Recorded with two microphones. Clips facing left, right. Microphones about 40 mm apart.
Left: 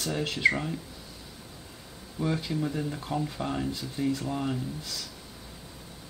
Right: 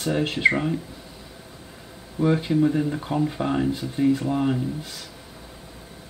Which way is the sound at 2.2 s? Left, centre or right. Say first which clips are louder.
Right 9 dB; right.